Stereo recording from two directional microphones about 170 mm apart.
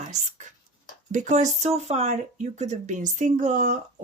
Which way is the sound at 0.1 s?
45° right (ahead or behind).